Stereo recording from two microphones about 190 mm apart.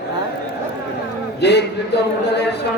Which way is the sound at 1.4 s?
65° left (ahead or behind).